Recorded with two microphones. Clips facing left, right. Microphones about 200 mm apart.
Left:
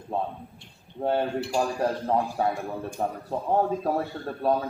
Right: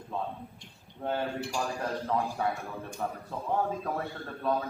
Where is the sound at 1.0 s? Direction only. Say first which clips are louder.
Left 6 dB; 35° left (ahead or behind).